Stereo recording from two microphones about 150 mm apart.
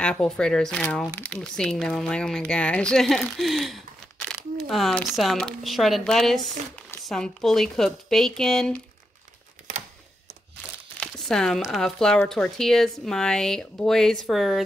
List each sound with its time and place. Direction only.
0.0 s speech: 5° left (ahead or behind)
11.0 s speech: 5° left (ahead or behind)